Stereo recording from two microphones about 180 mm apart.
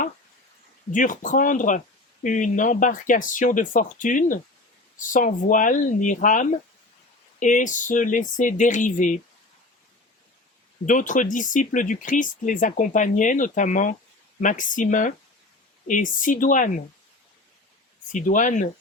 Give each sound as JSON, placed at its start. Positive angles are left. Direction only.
{"t": 0.9, "sound": "speech", "side_deg": 45}
{"t": 10.8, "sound": "speech", "side_deg": 45}
{"t": 18.1, "sound": "speech", "side_deg": 45}